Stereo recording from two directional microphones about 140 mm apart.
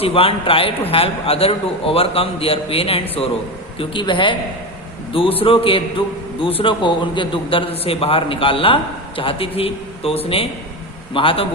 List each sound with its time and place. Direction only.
0.0 s a man's voice: 40° left (ahead or behind)